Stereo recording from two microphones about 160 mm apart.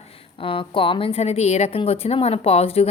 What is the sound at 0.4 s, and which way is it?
A woman's voice, 35° left (ahead or behind).